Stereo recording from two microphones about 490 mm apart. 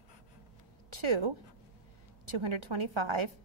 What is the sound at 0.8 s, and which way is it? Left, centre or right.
A woman's voice, right.